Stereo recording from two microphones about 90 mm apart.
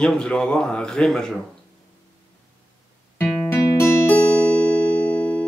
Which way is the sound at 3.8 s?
20° left (ahead or behind).